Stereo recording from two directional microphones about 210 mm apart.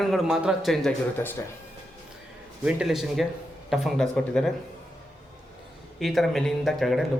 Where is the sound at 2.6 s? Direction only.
5° right (ahead or behind).